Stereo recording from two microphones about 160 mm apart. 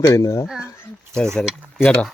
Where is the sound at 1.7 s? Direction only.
5° left (ahead or behind).